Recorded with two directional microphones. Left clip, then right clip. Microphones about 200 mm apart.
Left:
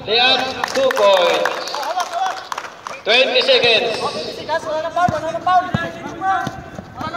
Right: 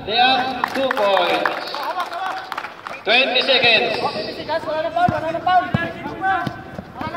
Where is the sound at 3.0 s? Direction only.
35° left (ahead or behind).